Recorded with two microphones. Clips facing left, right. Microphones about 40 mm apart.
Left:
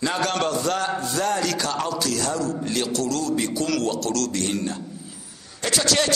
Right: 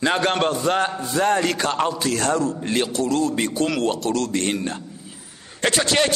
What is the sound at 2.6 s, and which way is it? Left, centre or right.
A man's voice, right.